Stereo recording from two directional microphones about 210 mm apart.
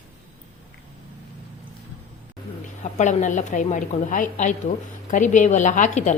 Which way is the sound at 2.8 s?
35° left (ahead or behind).